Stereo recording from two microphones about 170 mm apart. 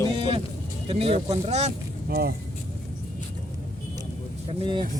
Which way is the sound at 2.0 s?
65° right (ahead or behind).